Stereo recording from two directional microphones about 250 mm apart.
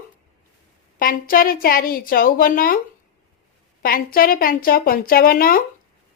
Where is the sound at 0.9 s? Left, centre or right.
Left.